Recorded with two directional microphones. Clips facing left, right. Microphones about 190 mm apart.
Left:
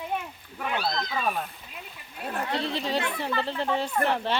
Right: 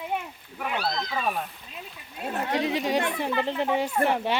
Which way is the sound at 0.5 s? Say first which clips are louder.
Even; centre (ahead or behind).